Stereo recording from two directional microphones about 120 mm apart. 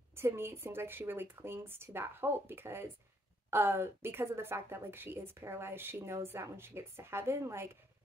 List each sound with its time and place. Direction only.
0.1 s a woman's voice: 20° right (ahead or behind)